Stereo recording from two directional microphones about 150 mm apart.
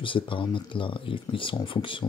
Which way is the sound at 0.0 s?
35° left (ahead or behind).